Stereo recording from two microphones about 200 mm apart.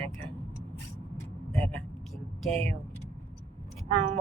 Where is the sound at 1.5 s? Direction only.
5° left (ahead or behind).